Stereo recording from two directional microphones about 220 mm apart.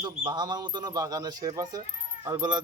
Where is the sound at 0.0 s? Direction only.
20° right (ahead or behind).